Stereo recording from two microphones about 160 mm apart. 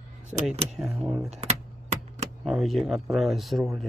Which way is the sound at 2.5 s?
Centre (ahead or behind).